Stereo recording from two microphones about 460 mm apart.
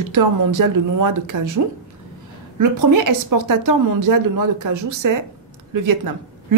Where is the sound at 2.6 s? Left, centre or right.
Right.